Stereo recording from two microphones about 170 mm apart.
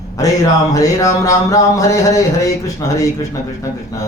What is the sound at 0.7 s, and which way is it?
Speech, 20° left (ahead or behind).